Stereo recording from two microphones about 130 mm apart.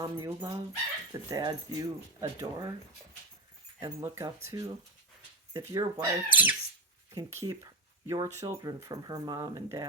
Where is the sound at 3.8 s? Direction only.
20° right (ahead or behind).